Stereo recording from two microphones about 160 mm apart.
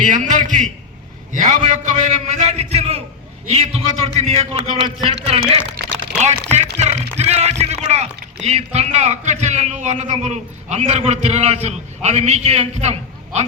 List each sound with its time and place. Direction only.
0.0 s a man's voice: 50° right (ahead or behind)